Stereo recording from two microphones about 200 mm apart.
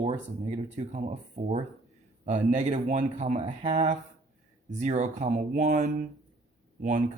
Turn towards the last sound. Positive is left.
turn(degrees=-40)  # may be behind; listen again after turning